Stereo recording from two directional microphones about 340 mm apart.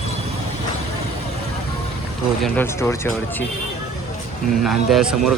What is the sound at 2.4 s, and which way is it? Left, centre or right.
Speech, centre.